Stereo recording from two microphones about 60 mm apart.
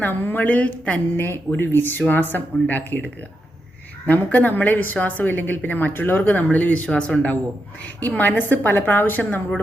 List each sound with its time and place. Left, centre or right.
0.0 s a woman's voice: left
1.1 s a woman's voice: left